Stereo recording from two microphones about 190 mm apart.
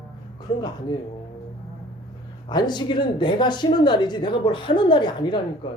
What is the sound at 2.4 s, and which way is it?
Speech, 20° left (ahead or behind).